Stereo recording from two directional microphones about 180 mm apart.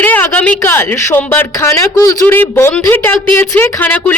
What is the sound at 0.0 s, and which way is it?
Speech, 10° left (ahead or behind).